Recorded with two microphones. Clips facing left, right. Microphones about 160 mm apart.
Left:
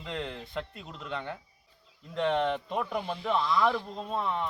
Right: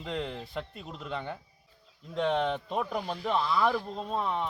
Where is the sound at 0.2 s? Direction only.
5° right (ahead or behind).